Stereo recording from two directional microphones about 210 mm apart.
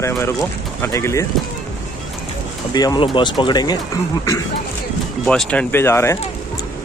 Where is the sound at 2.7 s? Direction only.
20° left (ahead or behind).